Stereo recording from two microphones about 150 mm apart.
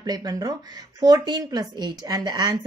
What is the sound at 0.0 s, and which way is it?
A woman's voice, 25° right (ahead or behind).